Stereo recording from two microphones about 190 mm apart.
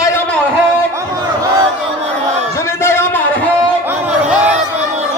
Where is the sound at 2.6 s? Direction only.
15° left (ahead or behind).